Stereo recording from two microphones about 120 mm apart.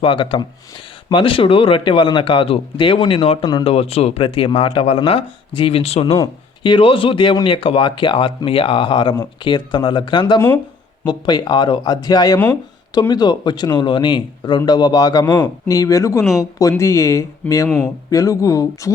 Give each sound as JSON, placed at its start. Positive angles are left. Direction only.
{"t": 0.0, "sound": "speech", "side_deg": 45}
{"t": 3.7, "sound": "speech", "side_deg": 55}
{"t": 6.6, "sound": "speech", "side_deg": 45}
{"t": 17.7, "sound": "speech", "side_deg": 5}
{"t": 18.1, "sound": "speech", "side_deg": 25}